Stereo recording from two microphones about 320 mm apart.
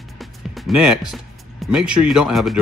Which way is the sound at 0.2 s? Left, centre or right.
Centre.